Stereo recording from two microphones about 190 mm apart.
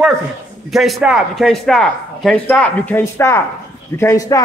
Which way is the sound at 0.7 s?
Centre (ahead or behind).